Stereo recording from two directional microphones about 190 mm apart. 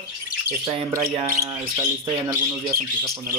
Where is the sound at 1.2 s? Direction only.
15° right (ahead or behind).